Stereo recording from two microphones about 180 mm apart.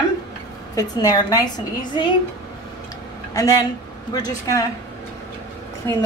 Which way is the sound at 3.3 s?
20° left (ahead or behind).